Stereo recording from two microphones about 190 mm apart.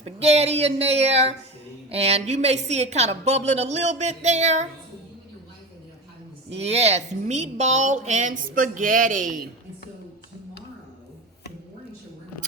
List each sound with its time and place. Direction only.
0.0 s speech: 30° right (ahead or behind)
6.5 s speech: 35° right (ahead or behind)